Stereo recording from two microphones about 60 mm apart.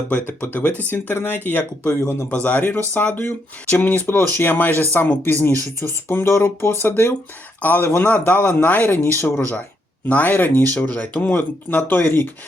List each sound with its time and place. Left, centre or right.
0.3 s speech: left
0.6 s speech: left
9.0 s speech: left